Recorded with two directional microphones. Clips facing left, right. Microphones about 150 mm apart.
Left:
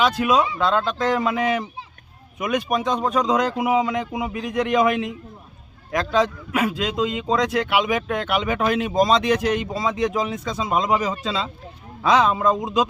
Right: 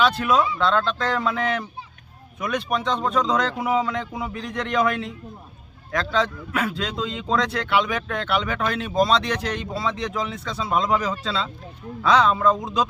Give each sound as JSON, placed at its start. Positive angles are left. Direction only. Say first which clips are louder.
{"t": 0.0, "sound": "a man's voice", "louder": "left 1 dB", "side_deg": 10}